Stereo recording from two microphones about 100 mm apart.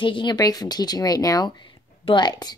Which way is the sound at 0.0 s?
55° left (ahead or behind).